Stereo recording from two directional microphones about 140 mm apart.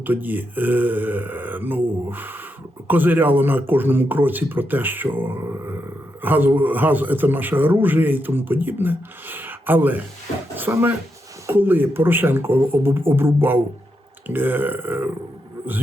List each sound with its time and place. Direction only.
0.0 s a man's voice: 15° right (ahead or behind)